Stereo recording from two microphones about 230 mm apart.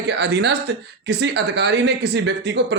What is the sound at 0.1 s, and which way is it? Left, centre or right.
Speech, right.